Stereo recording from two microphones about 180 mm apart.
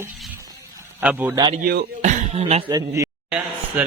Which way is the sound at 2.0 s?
40° right (ahead or behind).